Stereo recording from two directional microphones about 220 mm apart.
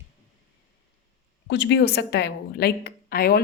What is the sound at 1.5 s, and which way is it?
A woman's voice, 55° left (ahead or behind).